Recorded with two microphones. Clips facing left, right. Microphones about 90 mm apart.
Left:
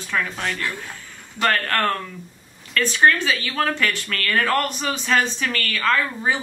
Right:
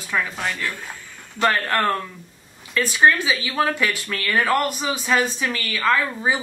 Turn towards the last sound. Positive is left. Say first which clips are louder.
# right 1 dB
turn(degrees=-10)  # may be behind; listen again after turning